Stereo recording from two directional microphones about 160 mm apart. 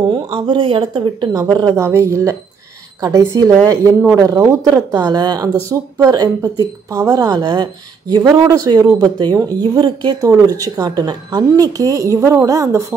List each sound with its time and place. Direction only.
0.1 s speech: 30° right (ahead or behind)